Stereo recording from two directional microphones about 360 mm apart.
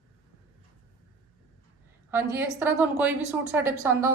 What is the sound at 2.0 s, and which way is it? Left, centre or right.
A woman's voice, centre.